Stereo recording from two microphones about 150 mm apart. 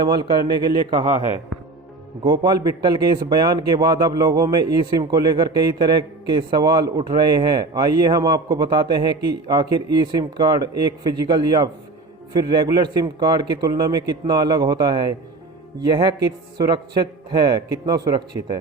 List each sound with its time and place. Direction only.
0.0 s a man's voice: 30° right (ahead or behind)
2.2 s a man's voice: 30° right (ahead or behind)